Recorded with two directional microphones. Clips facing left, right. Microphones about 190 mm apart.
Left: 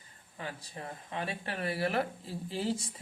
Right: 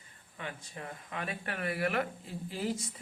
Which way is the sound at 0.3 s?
35° left (ahead or behind).